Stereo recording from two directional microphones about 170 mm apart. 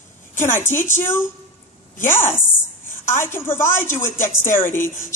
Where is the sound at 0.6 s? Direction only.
15° left (ahead or behind).